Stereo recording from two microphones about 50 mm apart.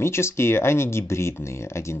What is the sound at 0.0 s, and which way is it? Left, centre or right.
Speech, left.